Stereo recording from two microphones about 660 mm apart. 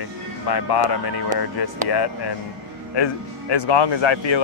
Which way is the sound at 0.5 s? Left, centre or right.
Left.